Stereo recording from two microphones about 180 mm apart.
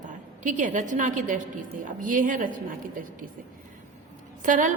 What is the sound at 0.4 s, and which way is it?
A woman's voice, 45° right (ahead or behind).